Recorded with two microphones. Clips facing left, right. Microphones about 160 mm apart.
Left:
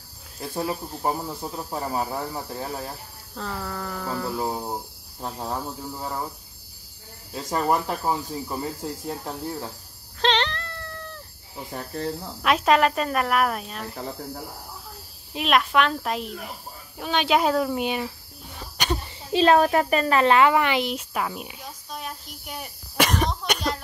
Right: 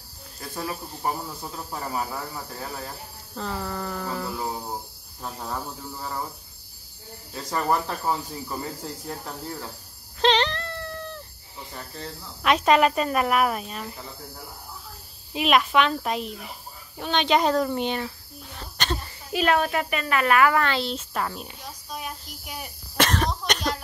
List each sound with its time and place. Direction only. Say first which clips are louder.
0.4 s speech: left 4 dB; 25° left (ahead or behind)
3.3 s speech: right 1 dB; centre (ahead or behind)
5.2 s speech: left 3 dB; 20° left (ahead or behind)
7.3 s cricket: left 2 dB; 20° left (ahead or behind)
9.0 s speech: left 3 dB; 20° left (ahead or behind)
10.2 s cat: right 2 dB; 5° right (ahead or behind)
11.7 s speech: left 8 dB; 50° left (ahead or behind)
12.4 s speech: right 1 dB; centre (ahead or behind)
15.3 s speech: right 1 dB; centre (ahead or behind)
18.6 s a sound: left 2 dB; 10° left (ahead or behind)
19.3 s speech: left 5 dB; 30° left (ahead or behind); by 21.5 s 10° left (ahead or behind)
21.9 s a sound: even; centre (ahead or behind)
22.9 s cough: left 1 dB; 10° left (ahead or behind)